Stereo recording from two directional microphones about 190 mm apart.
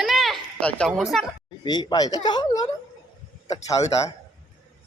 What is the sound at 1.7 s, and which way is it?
Speech, 20° left (ahead or behind).